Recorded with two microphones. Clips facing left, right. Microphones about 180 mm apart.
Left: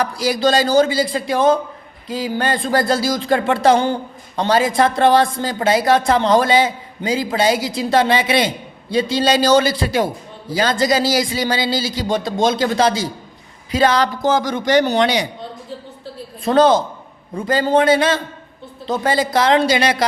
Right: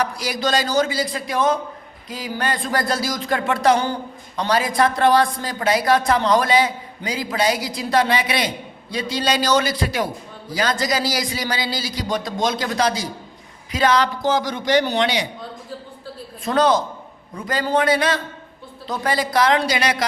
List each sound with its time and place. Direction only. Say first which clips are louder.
0.0 s a man's voice: left 6 dB; 30° left (ahead or behind)
13.7 s a sound: left 3 dB; 30° left (ahead or behind)
14.2 s a man's voice: left 3 dB; 50° left (ahead or behind)
16.4 s a man's voice: left 5 dB; 30° left (ahead or behind)